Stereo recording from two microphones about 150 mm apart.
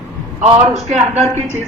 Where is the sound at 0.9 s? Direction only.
45° right (ahead or behind).